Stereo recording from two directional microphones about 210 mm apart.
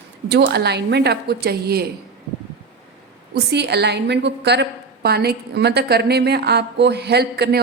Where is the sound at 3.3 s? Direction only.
50° right (ahead or behind).